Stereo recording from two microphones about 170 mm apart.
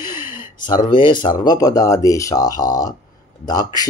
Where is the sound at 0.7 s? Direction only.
25° left (ahead or behind).